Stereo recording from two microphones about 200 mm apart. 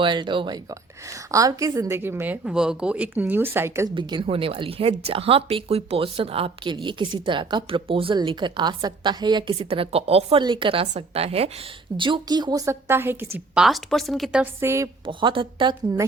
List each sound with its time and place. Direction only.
0.0 s a woman's voice: 25° right (ahead or behind)
3.9 s a woman's voice: 25° right (ahead or behind)
15.0 s a woman's voice: 25° right (ahead or behind)